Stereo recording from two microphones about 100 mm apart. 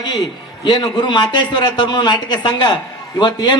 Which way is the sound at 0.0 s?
50° left (ahead or behind).